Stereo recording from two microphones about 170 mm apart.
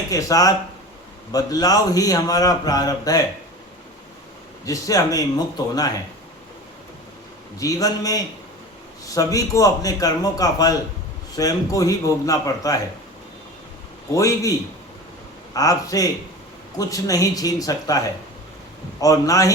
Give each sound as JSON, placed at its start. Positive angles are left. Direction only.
{"t": 0.1, "sound": "a man's voice", "side_deg": 20}
{"t": 4.6, "sound": "a man's voice", "side_deg": 20}
{"t": 7.6, "sound": "a man's voice", "side_deg": 20}
{"t": 14.1, "sound": "a man's voice", "side_deg": 20}
{"t": 15.5, "sound": "a man's voice", "side_deg": 20}